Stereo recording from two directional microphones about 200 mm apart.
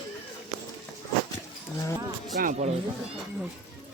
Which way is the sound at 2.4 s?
35° right (ahead or behind).